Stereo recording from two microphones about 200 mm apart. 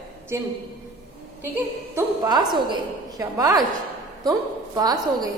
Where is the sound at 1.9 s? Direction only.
20° right (ahead or behind).